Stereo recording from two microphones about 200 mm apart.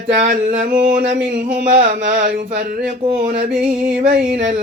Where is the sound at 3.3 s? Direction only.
55° right (ahead or behind).